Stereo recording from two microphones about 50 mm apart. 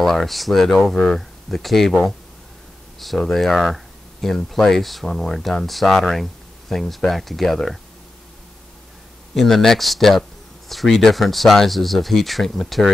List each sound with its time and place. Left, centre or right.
0.0 s speech: centre
0.9 s speech: left
1.5 s speech: centre
9.3 s speech: centre